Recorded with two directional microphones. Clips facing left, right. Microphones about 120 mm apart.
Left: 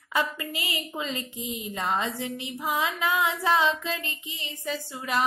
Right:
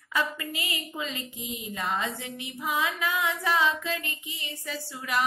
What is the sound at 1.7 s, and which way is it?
Female singing, 30° left (ahead or behind).